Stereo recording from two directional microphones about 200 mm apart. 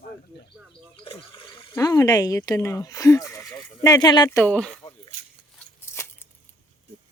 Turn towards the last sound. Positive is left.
turn(degrees=10)  # may be behind; listen again after turning